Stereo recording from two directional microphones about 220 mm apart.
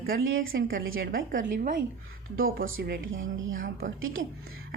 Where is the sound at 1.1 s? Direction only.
40° right (ahead or behind).